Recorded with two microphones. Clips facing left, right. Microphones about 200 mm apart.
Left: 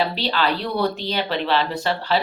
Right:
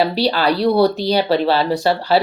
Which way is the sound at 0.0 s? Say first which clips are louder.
Right 6 dB; 40° right (ahead or behind).